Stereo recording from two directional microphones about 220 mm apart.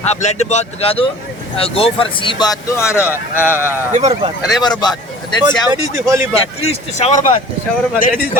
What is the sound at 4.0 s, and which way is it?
Speech, 30° right (ahead or behind).